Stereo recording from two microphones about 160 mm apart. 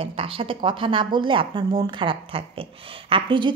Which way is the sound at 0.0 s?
35° right (ahead or behind).